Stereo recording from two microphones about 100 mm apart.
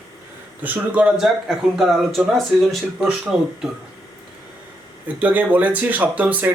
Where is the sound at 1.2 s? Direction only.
Centre (ahead or behind).